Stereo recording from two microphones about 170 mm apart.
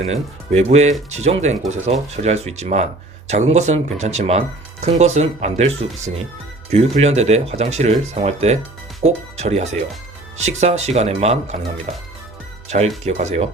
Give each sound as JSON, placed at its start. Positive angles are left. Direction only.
{"t": 0.0, "sound": "speech", "side_deg": -40}
{"t": 13.1, "sound": "speech", "side_deg": -40}